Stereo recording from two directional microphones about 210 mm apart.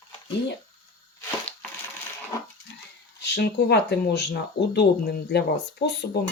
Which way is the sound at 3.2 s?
55° left (ahead or behind).